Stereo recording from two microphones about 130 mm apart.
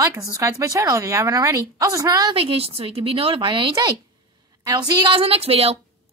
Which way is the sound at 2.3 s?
50° right (ahead or behind).